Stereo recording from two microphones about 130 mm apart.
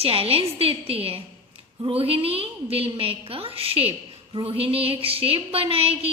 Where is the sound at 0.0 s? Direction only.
50° right (ahead or behind).